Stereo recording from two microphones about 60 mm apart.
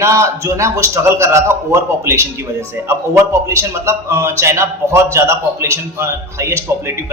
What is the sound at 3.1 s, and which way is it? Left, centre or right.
A man's voice, right.